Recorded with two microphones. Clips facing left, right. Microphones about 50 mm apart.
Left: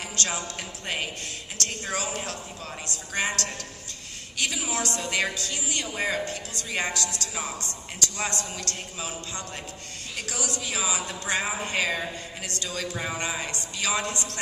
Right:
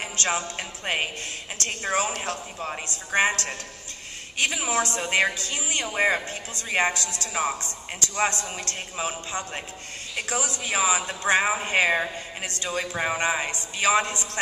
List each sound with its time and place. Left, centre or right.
0.0 s a woman's voice: right